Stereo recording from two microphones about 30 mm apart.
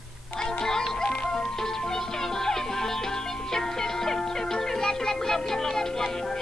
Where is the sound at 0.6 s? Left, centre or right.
Centre.